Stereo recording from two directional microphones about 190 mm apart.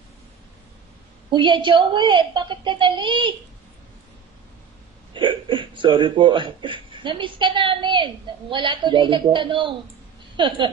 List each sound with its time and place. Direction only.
1.3 s speech: 25° right (ahead or behind)
5.1 s speech: 25° right (ahead or behind)